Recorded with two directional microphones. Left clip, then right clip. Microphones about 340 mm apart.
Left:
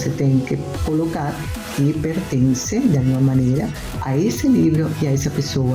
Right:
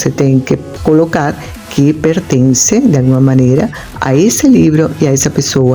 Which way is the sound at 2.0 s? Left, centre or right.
Right.